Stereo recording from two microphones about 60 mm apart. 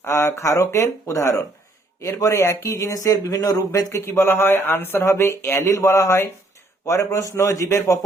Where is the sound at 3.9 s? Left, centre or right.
Left.